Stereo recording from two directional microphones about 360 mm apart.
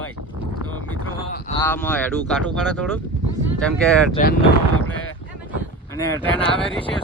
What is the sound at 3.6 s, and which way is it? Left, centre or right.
Speech, centre.